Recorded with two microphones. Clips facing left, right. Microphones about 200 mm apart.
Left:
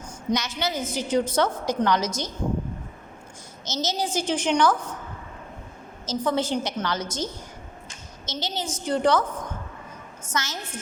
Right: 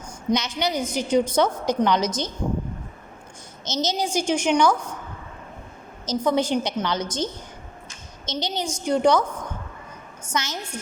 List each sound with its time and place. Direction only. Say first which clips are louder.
0.3 s a woman's voice: right 3 dB; 15° right (ahead or behind)
3.7 s a woman's voice: right 3 dB; 20° right (ahead or behind)
6.1 s a woman's voice: right 3 dB; 15° right (ahead or behind)
8.3 s a woman's voice: right 3 dB; 15° right (ahead or behind)
10.2 s a woman's voice: right 2 dB; 15° right (ahead or behind)